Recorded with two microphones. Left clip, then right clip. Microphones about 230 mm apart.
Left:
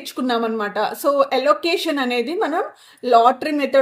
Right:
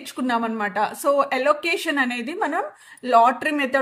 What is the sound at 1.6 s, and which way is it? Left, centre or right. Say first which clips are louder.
Speech: left 2 dB; right.